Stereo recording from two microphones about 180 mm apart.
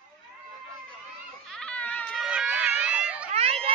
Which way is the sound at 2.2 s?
5° right (ahead or behind).